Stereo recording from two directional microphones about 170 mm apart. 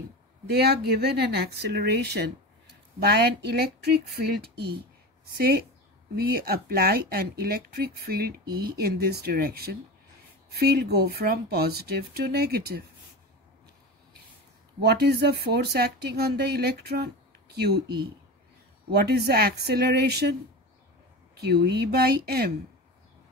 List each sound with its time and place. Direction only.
0.5 s speech: 70° right (ahead or behind)
6.1 s speech: 65° right (ahead or behind)
14.8 s speech: 70° right (ahead or behind)
21.4 s speech: 75° right (ahead or behind)